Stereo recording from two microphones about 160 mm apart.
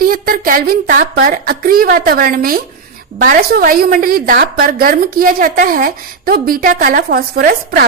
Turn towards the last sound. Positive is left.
turn(degrees=-70)  # may be behind; listen again after turning